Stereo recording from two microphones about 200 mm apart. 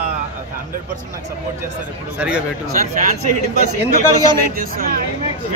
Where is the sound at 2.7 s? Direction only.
40° right (ahead or behind).